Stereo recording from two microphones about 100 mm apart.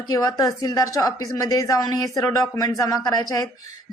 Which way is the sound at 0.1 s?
35° left (ahead or behind).